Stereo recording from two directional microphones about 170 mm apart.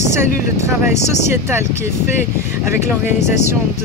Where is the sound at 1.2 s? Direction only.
15° right (ahead or behind).